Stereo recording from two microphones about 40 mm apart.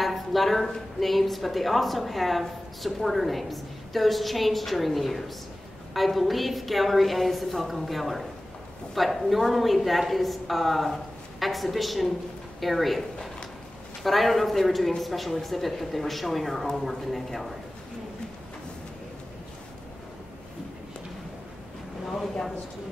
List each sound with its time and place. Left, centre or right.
0.0 s a woman's voice: centre
22.0 s speech: centre